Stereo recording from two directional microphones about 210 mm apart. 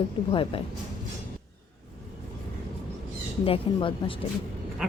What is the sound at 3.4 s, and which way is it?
Speech, 25° left (ahead or behind).